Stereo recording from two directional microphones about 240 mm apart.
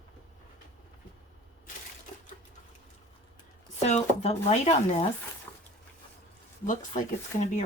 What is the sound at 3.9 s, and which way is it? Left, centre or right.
Speech, left.